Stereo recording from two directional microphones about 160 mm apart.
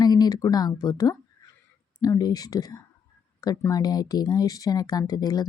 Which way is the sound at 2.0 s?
25° left (ahead or behind).